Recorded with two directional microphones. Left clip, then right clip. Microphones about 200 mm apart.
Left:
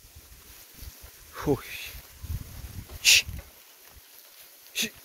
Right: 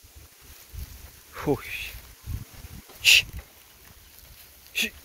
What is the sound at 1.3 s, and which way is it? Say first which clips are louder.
Speech: right 1 dB; centre (ahead or behind).